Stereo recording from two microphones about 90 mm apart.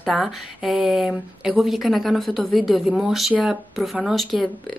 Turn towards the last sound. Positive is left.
turn(degrees=0)  # may be behind; listen again after turning